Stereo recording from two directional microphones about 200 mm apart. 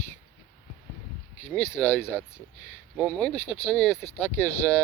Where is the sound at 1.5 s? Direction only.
5° left (ahead or behind).